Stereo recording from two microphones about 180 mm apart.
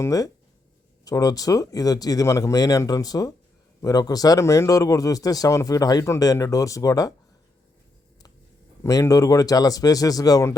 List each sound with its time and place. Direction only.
0.0 s speech: 20° left (ahead or behind)
8.8 s speech: 20° left (ahead or behind)